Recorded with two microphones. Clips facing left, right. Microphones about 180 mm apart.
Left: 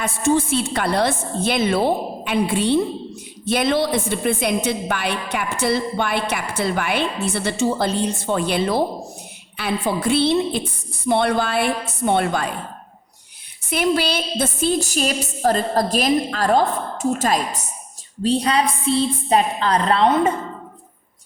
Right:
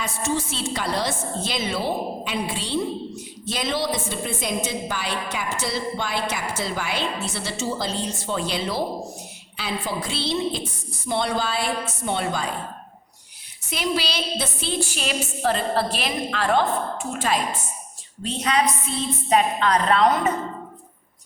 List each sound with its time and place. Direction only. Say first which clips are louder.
0.0 s a woman's voice: left 7 dB; 55° left (ahead or behind)
13.7 s a woman's voice: left 6 dB; 55° left (ahead or behind); by 20.3 s 30° left (ahead or behind)